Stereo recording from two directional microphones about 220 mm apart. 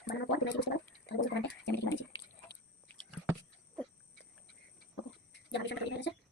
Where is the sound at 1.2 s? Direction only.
55° left (ahead or behind).